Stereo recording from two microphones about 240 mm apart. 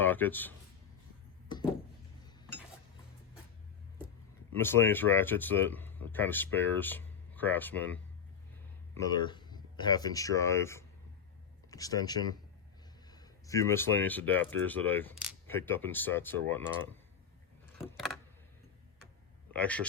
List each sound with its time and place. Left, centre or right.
0.0 s a man's voice: centre
4.5 s speech: centre
19.5 s a man's voice: centre